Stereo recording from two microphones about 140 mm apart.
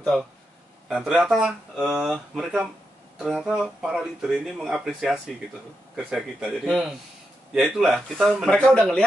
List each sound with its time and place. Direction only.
0.1 s speech: centre (ahead or behind)